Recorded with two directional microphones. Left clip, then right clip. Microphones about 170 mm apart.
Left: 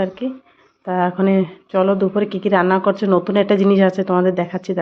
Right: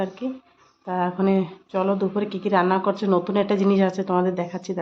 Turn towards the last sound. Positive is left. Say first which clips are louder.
# left 7 dB
turn(degrees=25)  # may be behind; listen again after turning